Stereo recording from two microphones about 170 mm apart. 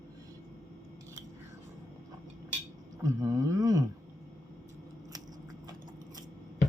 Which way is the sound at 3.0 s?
20° right (ahead or behind).